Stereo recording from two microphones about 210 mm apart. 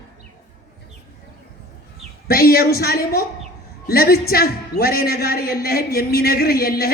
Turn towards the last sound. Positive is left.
turn(degrees=45)  # may be behind; listen again after turning